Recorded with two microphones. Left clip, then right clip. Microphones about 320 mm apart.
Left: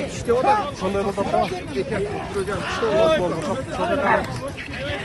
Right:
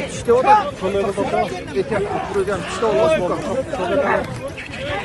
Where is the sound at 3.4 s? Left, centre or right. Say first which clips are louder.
Right 2 dB; left.